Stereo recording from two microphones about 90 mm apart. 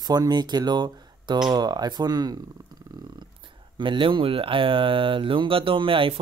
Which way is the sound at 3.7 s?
65° right (ahead or behind).